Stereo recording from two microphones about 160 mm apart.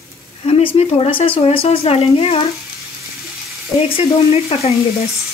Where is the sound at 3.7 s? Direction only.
35° left (ahead or behind).